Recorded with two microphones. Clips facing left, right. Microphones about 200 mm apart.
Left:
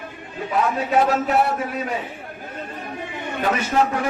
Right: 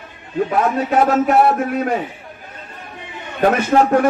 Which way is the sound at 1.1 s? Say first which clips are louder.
Right 6 dB; 50° right (ahead or behind).